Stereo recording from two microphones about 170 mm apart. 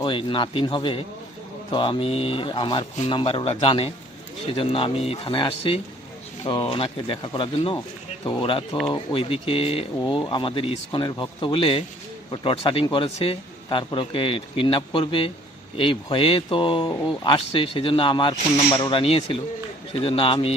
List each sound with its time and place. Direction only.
0.0 s a man's voice: 30° left (ahead or behind)